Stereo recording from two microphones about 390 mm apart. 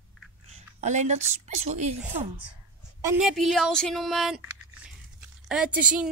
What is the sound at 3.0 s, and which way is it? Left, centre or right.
Speech, centre.